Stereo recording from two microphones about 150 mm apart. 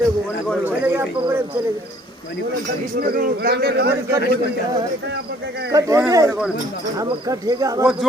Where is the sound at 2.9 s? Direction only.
85° right.